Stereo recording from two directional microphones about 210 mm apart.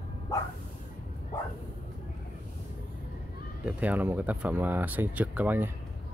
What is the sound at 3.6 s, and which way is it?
Speech, 5° right (ahead or behind).